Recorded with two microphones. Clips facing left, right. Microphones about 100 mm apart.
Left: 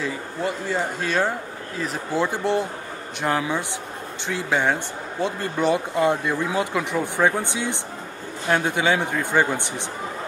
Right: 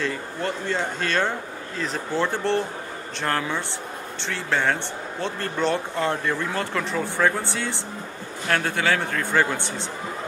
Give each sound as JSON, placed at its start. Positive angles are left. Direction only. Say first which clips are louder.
{"t": 0.0, "sound": "speech", "louder": "left 1 dB", "side_deg": 5}